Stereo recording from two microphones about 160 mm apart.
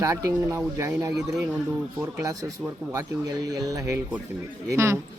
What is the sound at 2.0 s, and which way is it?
Speech, 20° right (ahead or behind).